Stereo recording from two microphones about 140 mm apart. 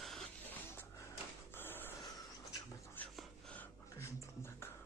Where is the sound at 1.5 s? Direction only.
15° left (ahead or behind).